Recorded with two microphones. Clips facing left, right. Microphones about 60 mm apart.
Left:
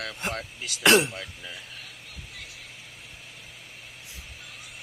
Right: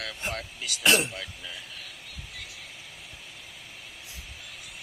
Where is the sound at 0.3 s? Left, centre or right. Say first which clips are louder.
Left 1 dB; left.